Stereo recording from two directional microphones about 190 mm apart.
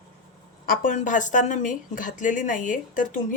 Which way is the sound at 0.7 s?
45° left (ahead or behind).